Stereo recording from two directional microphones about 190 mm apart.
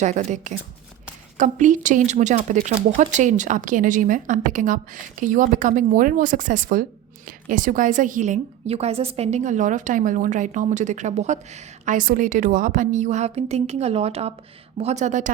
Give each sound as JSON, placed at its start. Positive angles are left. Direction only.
{"t": 0.0, "sound": "a woman's voice", "side_deg": -40}